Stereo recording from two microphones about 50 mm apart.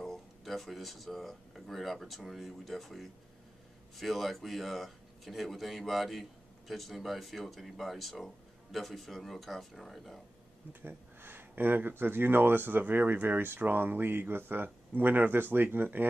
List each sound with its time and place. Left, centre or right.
0.0 s speech: centre
10.7 s speech: right